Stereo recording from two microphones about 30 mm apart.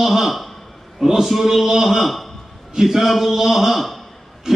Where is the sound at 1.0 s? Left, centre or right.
Centre.